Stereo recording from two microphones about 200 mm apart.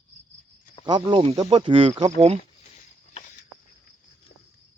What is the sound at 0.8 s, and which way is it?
Cricket, 20° right (ahead or behind).